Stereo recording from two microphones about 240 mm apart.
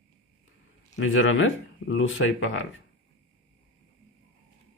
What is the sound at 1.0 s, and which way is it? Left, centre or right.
Speech, left.